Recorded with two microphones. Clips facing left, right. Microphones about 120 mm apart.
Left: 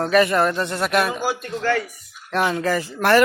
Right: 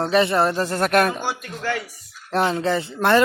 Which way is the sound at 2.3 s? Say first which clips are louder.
Even; 30° right (ahead or behind).